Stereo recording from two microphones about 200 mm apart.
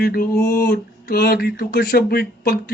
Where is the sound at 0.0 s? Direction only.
50° left (ahead or behind).